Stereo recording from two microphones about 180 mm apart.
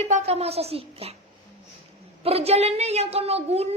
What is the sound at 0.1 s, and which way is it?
A woman's voice, 35° right (ahead or behind).